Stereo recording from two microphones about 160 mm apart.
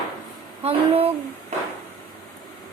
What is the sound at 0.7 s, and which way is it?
Speech, 40° right (ahead or behind).